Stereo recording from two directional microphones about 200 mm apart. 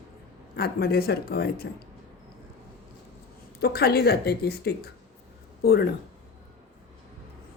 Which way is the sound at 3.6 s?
50° left (ahead or behind).